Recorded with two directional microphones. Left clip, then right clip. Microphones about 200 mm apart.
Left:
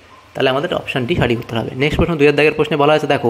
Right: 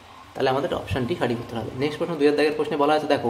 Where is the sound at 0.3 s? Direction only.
25° left (ahead or behind).